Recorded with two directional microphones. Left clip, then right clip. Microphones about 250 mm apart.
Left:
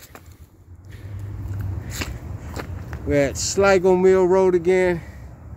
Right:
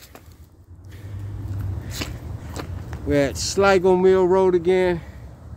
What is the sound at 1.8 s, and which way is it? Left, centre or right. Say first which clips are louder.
Walk: left 1 dB; centre.